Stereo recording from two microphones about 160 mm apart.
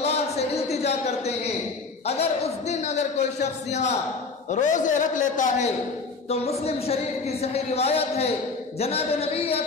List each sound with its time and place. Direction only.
0.0 s a sound: 40° left (ahead or behind)
2.0 s a man's voice: 40° left (ahead or behind)
6.2 s a man's voice: 40° left (ahead or behind)